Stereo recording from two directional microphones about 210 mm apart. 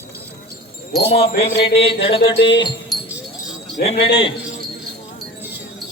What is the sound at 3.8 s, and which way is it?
Speech, 25° left (ahead or behind).